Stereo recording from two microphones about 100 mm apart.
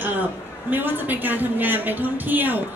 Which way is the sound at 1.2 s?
20° right (ahead or behind).